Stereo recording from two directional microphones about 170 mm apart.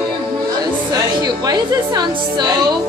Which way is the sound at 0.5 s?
20° right (ahead or behind).